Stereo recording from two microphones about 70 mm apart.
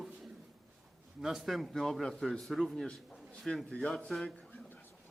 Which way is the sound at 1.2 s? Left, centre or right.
Centre.